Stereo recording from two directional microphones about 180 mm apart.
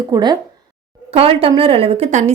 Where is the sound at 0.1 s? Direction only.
25° right (ahead or behind).